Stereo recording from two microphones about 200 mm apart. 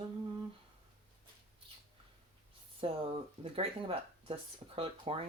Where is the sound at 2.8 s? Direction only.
30° right (ahead or behind).